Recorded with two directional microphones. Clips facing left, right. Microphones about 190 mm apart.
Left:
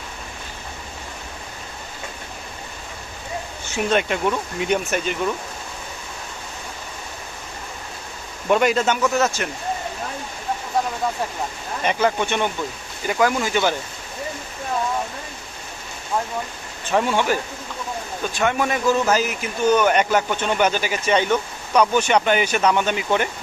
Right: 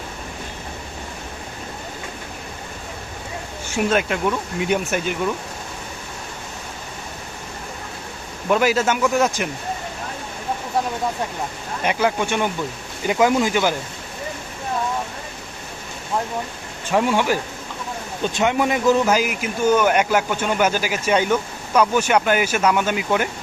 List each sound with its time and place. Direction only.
3.8 s speech: centre (ahead or behind)
8.4 s a man's voice: 5° right (ahead or behind)
11.8 s a man's voice: 10° right (ahead or behind)
16.9 s a man's voice: 10° right (ahead or behind)
18.2 s a man's voice: 20° right (ahead or behind); by 23.3 s 5° right (ahead or behind)